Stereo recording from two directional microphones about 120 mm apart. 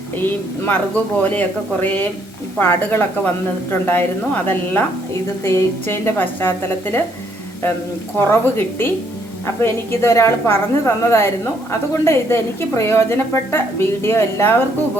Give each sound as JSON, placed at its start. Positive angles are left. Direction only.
{"t": 0.2, "sound": "a woman's voice", "side_deg": 15}
{"t": 5.4, "sound": "a woman's voice", "side_deg": 20}
{"t": 8.2, "sound": "a woman's voice", "side_deg": 20}